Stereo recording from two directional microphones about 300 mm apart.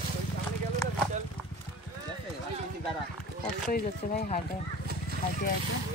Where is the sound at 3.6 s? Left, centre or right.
Left.